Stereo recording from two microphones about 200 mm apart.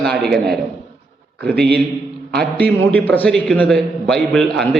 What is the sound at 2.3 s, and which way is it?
A man's voice, 5° left (ahead or behind).